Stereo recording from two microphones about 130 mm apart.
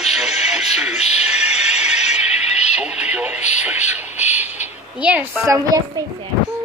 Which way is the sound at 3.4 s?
60° left (ahead or behind).